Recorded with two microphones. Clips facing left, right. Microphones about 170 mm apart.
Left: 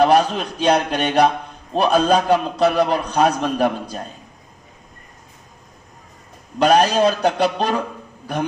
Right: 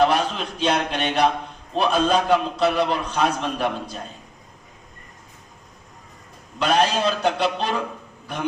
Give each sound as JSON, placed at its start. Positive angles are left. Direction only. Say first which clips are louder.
{"t": 0.0, "sound": "a man's voice", "louder": "left 5 dB", "side_deg": 45}
{"t": 6.6, "sound": "speech", "louder": "left 6 dB", "side_deg": 40}